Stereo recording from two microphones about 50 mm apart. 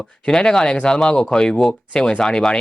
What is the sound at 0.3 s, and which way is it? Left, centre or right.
Speech, centre.